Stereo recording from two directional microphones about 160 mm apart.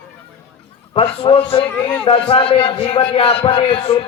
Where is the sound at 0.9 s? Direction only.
35° left (ahead or behind).